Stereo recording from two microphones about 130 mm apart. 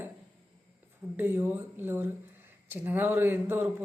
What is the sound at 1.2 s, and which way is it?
A man's voice, 15° right (ahead or behind).